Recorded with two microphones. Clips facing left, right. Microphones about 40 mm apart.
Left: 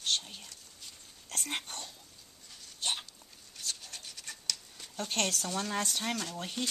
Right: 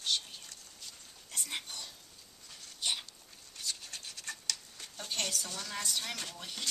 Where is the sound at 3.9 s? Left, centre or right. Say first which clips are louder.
Right 2 dB; centre.